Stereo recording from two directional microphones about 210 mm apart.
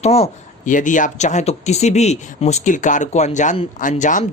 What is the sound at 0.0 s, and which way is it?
Speech, 30° left (ahead or behind).